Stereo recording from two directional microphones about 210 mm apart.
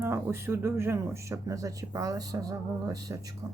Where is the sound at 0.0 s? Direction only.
10° right (ahead or behind).